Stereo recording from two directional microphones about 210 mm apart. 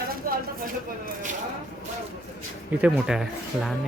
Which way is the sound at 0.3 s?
45° right (ahead or behind).